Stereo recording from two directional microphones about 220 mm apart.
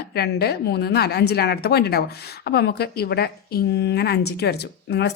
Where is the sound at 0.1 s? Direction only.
45° left (ahead or behind).